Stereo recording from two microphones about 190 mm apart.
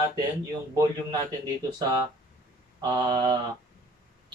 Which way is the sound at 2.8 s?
20° right (ahead or behind).